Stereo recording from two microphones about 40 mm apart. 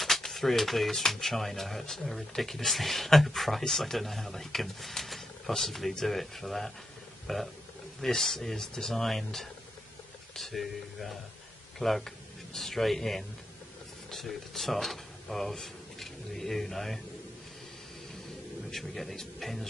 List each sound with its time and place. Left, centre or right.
0.0 s speech: centre
11.8 s speech: left
12.5 s speech: centre
18.7 s speech: centre